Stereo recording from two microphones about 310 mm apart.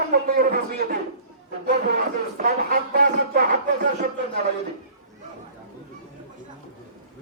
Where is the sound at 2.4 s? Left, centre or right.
Right.